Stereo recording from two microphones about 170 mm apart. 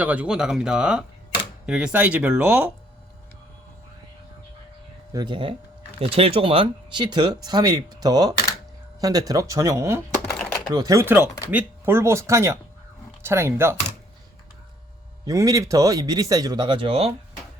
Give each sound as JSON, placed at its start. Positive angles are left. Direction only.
{"t": 0.0, "sound": "speech", "side_deg": -10}
{"t": 5.1, "sound": "speech", "side_deg": -25}
{"t": 10.2, "sound": "typing", "side_deg": 5}
{"t": 10.8, "sound": "speech", "side_deg": -20}
{"t": 15.2, "sound": "speech", "side_deg": -20}